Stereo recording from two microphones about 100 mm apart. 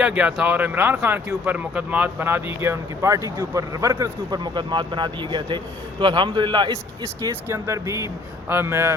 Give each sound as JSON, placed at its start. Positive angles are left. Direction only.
{"t": 0.0, "sound": "a man's voice", "side_deg": -10}
{"t": 7.5, "sound": "speech", "side_deg": -30}